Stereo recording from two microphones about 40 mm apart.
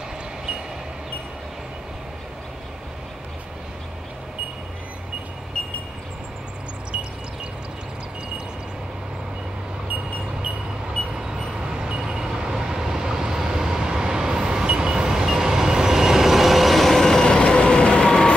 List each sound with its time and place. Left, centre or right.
11.1 s vehicle: centre
14.8 s train: centre